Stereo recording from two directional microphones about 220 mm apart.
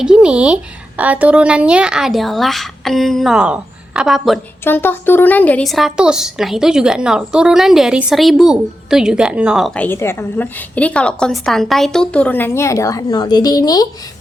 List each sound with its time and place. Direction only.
0.0 s a woman's voice: 5° right (ahead or behind)
4.6 s a woman's voice: 10° left (ahead or behind)